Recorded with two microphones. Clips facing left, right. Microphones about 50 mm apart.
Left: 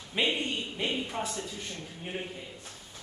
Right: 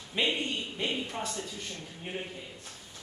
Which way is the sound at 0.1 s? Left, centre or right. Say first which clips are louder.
Left 1 dB; centre.